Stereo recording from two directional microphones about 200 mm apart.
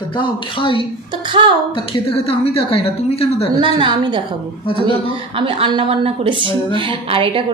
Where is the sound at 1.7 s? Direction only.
25° left (ahead or behind).